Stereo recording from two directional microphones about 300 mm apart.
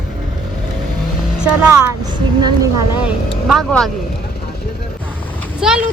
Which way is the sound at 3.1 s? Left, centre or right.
Centre.